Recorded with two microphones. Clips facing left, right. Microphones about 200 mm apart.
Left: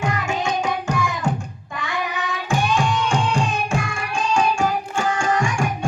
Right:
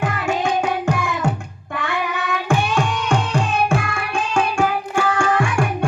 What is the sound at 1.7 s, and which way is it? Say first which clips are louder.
Child singing: right 4 dB; 60° right (ahead or behind).